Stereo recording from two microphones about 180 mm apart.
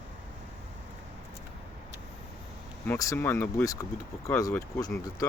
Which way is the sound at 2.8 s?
15° left (ahead or behind).